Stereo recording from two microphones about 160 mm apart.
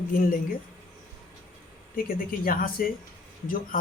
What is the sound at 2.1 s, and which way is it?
Speech, 65° left (ahead or behind).